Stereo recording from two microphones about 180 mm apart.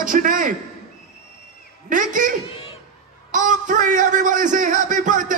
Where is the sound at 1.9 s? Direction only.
45° right (ahead or behind).